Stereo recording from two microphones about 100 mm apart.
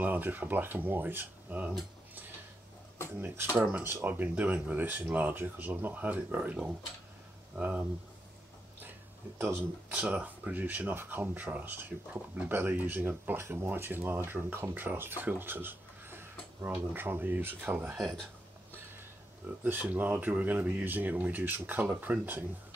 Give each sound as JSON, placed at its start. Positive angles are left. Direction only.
{"t": 0.0, "sound": "speech", "side_deg": -15}
{"t": 3.2, "sound": "speech", "side_deg": -25}
{"t": 9.4, "sound": "speech", "side_deg": -20}
{"t": 17.9, "sound": "speech", "side_deg": 0}
{"t": 19.6, "sound": "speech", "side_deg": -15}